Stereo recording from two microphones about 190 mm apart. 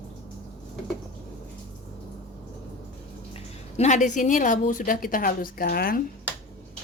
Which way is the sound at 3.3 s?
35° left (ahead or behind).